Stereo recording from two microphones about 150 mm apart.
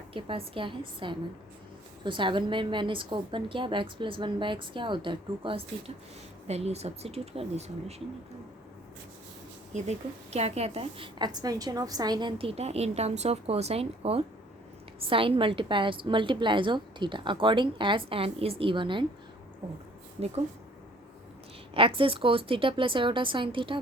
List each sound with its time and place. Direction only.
0.1 s a woman's voice: 35° right (ahead or behind)
9.7 s a woman's voice: 50° right (ahead or behind); by 19.0 s 35° right (ahead or behind)
21.8 s a woman's voice: 35° right (ahead or behind)